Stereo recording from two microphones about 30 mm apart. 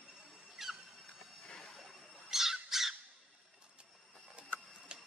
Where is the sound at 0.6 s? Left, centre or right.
Centre.